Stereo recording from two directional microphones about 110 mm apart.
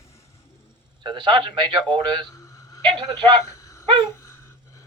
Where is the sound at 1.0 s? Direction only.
50° right (ahead or behind).